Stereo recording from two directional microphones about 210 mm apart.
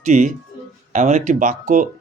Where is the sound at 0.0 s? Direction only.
35° right (ahead or behind).